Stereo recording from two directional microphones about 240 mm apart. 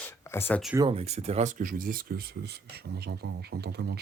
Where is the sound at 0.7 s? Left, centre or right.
Right.